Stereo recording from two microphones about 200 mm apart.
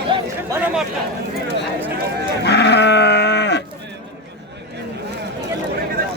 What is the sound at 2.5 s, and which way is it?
Sheep, 55° left (ahead or behind).